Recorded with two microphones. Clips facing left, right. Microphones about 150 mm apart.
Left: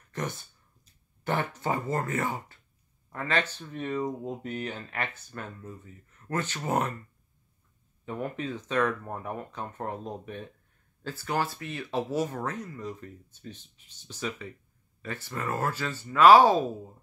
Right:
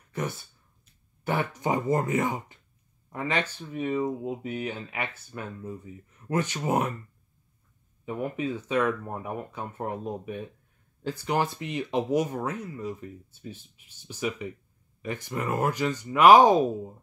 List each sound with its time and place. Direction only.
0.1 s speech: 10° right (ahead or behind)
8.0 s speech: 10° right (ahead or behind)